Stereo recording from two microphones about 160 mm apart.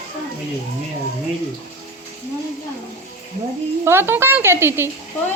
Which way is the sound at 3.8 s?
15° right (ahead or behind).